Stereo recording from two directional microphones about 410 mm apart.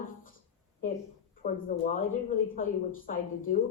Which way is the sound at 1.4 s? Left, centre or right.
Centre.